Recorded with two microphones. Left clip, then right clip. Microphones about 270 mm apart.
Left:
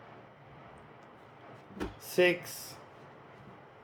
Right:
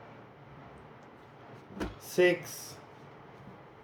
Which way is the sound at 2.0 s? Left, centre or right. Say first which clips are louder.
Right 1 dB; centre.